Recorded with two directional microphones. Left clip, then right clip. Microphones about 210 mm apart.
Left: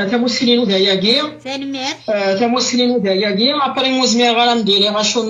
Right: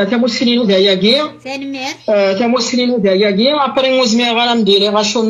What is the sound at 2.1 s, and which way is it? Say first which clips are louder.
A man's voice: right 4 dB; 50° right (ahead or behind).